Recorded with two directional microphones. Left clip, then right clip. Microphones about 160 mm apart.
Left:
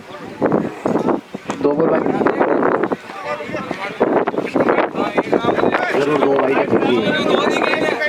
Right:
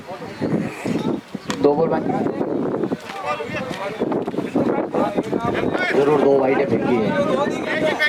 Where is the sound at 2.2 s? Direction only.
25° left (ahead or behind).